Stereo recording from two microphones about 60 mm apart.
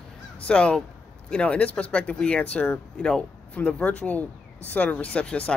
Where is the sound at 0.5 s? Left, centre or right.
Centre.